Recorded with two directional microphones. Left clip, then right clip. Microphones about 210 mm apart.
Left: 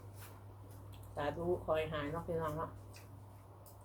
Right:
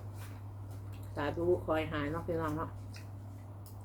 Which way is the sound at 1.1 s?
20° right (ahead or behind).